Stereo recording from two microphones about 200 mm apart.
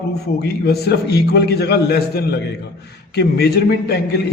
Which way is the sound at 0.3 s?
55° left (ahead or behind).